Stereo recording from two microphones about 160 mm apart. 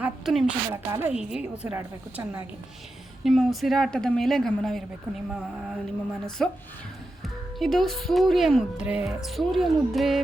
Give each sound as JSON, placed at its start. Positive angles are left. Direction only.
{"t": 0.0, "sound": "a sound", "side_deg": -5}
{"t": 0.7, "sound": "a woman's voice", "side_deg": -15}
{"t": 3.2, "sound": "speech", "side_deg": 0}
{"t": 7.6, "sound": "speech", "side_deg": 0}